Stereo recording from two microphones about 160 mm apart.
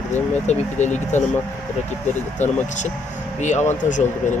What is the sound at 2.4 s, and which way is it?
Speech, 45° left (ahead or behind).